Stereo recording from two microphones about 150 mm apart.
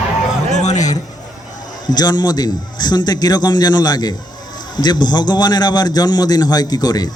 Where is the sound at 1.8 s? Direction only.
25° left (ahead or behind).